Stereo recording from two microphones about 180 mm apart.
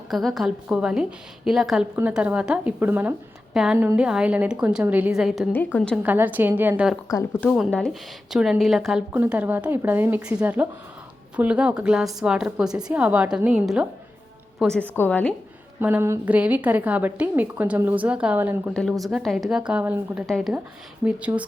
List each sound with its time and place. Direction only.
0.1 s a woman's voice: centre (ahead or behind)
6.0 s a woman's voice: 10° right (ahead or behind)
7.1 s a woman's voice: 15° left (ahead or behind)
7.5 s a woman's voice: centre (ahead or behind)
14.6 s a woman's voice: 5° left (ahead or behind)
15.8 s a woman's voice: 10° right (ahead or behind)
18.7 s a woman's voice: centre (ahead or behind)